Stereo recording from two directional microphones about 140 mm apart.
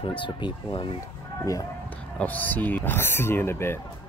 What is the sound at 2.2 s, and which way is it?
Speech, 10° left (ahead or behind).